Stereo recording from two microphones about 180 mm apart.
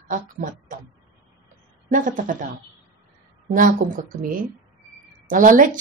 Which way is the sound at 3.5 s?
45° right (ahead or behind).